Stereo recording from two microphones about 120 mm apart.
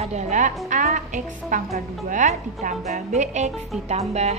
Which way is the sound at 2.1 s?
80° right.